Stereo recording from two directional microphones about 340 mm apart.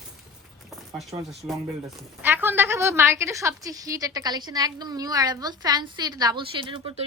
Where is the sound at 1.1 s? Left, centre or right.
Centre.